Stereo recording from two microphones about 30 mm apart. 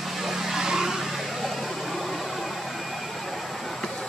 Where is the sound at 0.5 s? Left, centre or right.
Centre.